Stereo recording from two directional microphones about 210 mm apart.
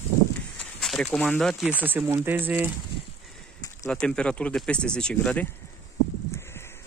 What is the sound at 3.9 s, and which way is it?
Speech, 5° left (ahead or behind).